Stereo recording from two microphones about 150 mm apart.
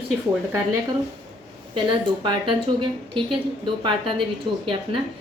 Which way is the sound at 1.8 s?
30° right (ahead or behind).